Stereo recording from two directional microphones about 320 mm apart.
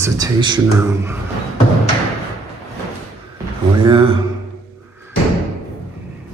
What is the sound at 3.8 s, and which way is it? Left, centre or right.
Speech, centre.